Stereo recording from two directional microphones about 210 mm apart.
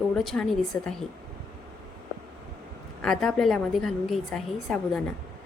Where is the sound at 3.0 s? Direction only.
Centre (ahead or behind).